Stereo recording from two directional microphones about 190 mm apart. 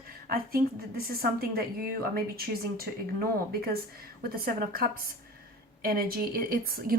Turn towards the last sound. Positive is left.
turn(degrees=-50)  # may be behind; listen again after turning